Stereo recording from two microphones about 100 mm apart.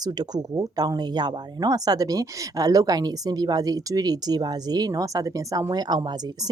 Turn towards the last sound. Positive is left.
turn(degrees=-40)  # may be behind; listen again after turning